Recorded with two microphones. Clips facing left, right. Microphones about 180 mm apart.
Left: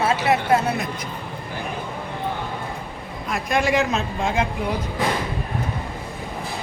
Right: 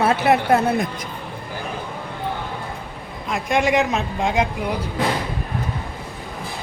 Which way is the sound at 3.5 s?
15° right (ahead or behind).